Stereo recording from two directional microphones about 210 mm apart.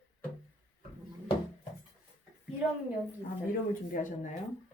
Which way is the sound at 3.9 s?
40° left (ahead or behind).